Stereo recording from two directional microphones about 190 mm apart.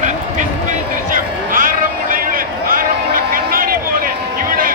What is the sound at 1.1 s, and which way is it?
Vehicle, 45° right (ahead or behind).